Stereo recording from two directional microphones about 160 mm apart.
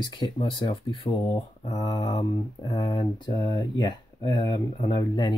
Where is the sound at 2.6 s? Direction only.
25° left (ahead or behind).